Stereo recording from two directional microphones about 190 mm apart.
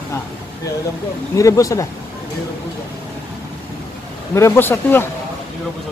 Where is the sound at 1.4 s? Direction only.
15° left (ahead or behind).